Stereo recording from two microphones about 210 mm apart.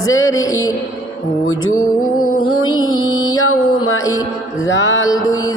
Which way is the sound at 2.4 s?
85° left.